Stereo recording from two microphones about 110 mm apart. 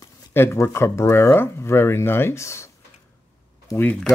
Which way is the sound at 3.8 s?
10° left (ahead or behind).